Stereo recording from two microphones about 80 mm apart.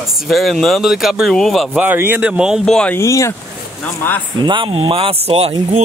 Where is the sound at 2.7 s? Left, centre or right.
Centre.